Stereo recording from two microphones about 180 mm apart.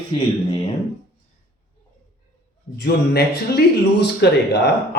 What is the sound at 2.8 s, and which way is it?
A man's voice, 65° left (ahead or behind).